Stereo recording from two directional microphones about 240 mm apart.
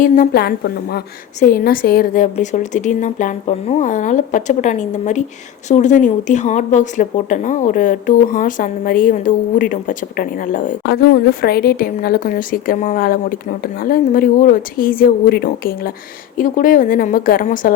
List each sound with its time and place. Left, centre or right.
0.0 s a woman's voice: left